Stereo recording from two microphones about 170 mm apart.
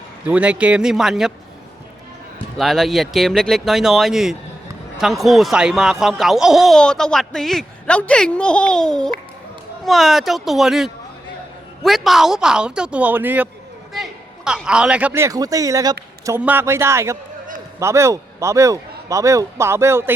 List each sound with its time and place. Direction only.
0.3 s speech: 10° right (ahead or behind)
2.6 s a man's voice: centre (ahead or behind)